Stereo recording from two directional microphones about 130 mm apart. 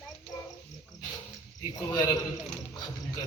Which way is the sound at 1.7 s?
30° left (ahead or behind).